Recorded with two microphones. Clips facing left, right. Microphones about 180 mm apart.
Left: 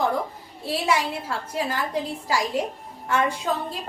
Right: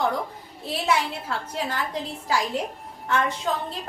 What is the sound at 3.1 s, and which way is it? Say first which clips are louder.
Speech: left 1 dB; 10° left (ahead or behind).